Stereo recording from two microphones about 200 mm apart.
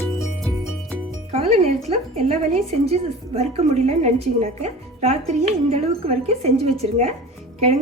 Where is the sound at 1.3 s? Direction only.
30° right (ahead or behind).